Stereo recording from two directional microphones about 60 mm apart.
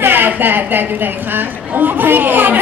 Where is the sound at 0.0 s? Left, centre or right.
Right.